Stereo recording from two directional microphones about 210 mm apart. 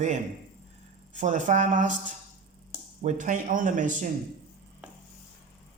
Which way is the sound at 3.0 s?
35° right (ahead or behind).